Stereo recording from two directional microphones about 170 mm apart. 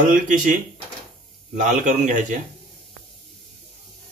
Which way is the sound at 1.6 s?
45° right (ahead or behind).